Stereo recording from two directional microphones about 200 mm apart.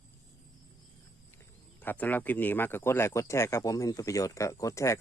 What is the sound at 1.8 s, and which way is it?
Speech, 10° left (ahead or behind).